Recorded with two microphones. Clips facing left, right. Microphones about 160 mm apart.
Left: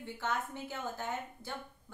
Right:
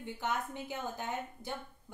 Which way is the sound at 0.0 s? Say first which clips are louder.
Right 1 dB; 20° right (ahead or behind).